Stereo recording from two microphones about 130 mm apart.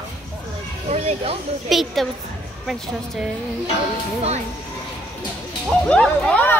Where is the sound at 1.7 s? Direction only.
Centre (ahead or behind).